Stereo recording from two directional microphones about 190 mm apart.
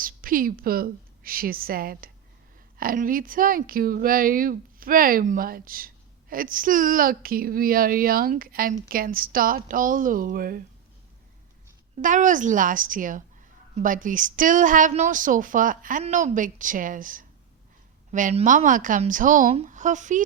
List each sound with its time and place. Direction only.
0.0 s a woman's voice: 45° right (ahead or behind)
12.0 s speech: 45° right (ahead or behind)